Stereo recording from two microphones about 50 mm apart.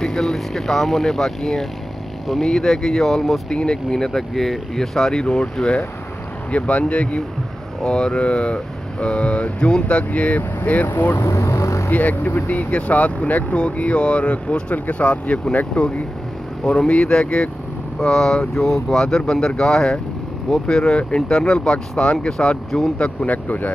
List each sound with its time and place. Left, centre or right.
0.0 s speech: centre
6.5 s speech: left
11.2 s speech: left
11.9 s speech: left